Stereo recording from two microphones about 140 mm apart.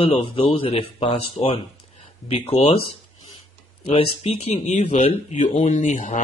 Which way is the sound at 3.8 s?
50° left (ahead or behind).